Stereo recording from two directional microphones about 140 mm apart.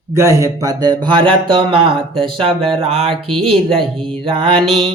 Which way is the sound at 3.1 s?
Centre (ahead or behind).